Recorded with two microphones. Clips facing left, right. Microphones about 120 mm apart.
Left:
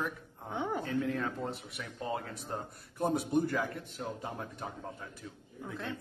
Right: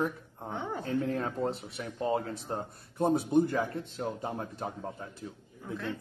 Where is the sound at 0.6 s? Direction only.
15° left (ahead or behind).